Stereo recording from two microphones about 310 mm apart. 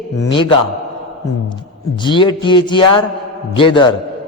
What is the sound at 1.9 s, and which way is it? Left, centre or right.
A man's voice, centre.